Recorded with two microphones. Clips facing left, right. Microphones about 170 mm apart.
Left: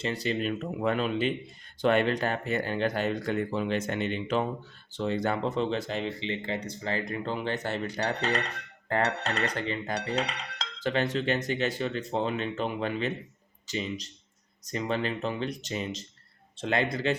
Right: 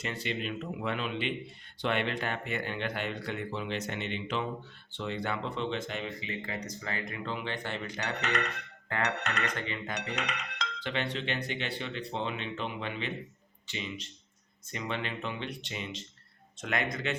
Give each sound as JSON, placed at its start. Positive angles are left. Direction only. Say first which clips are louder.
{"t": 0.0, "sound": "speech", "louder": "left 6 dB", "side_deg": 35}
{"t": 16.6, "sound": "speech", "louder": "left 5 dB", "side_deg": 30}